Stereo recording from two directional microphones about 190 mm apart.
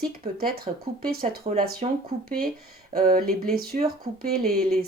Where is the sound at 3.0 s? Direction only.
50° right (ahead or behind).